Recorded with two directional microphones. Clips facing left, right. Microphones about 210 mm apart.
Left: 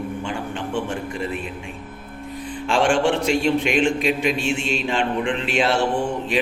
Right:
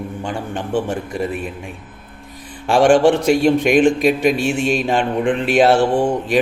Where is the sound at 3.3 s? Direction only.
50° right (ahead or behind).